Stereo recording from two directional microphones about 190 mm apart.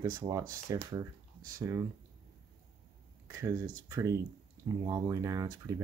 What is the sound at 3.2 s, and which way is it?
Speech, 15° right (ahead or behind).